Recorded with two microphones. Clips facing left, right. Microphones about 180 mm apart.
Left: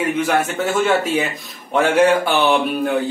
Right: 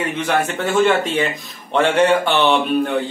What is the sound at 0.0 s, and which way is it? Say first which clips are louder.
Speech: left 2 dB; 10° left (ahead or behind).